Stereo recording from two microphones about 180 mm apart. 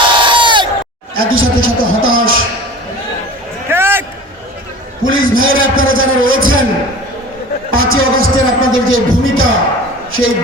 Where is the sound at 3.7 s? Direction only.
10° right (ahead or behind).